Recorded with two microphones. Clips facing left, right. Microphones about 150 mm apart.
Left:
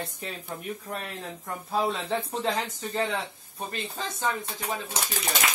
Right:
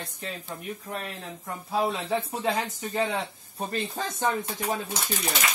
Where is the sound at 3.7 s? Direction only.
45° right (ahead or behind).